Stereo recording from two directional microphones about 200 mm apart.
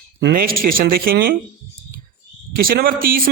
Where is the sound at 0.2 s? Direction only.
50° right (ahead or behind).